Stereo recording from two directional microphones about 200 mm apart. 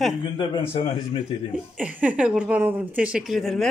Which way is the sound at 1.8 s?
5° right (ahead or behind).